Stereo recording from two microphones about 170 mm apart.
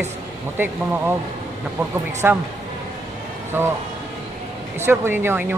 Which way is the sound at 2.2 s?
15° right (ahead or behind).